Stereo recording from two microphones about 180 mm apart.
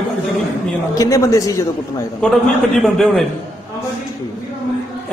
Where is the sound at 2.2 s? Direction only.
5° left (ahead or behind).